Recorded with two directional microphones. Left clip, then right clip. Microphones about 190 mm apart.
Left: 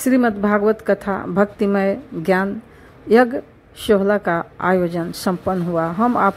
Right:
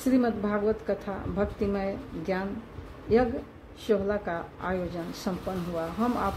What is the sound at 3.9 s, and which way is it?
A woman's voice, 35° left (ahead or behind).